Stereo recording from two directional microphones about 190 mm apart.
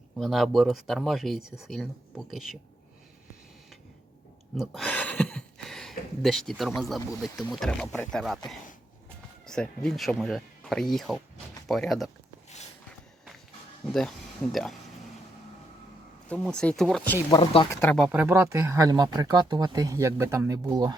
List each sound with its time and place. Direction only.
0.2 s speech: centre (ahead or behind)
4.5 s a sound: centre (ahead or behind)
6.2 s speech: centre (ahead or behind)
9.5 s speech: 5° left (ahead or behind)
13.8 s speech: 5° left (ahead or behind)
16.3 s speech: 5° left (ahead or behind)
17.2 s speech: 25° left (ahead or behind)
17.7 s speech: 10° left (ahead or behind)
18.0 s speech: 5° right (ahead or behind)